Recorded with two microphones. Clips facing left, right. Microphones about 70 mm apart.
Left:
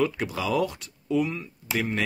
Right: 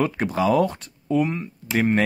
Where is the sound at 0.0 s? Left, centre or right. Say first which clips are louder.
Right 5 dB; right.